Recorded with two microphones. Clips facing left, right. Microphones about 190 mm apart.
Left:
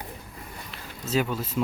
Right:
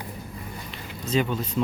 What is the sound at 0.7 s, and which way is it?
Speech, 5° left (ahead or behind).